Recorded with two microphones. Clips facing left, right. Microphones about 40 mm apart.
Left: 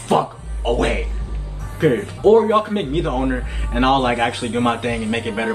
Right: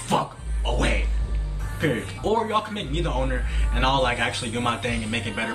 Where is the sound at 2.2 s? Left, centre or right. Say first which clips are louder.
Left 11 dB; centre.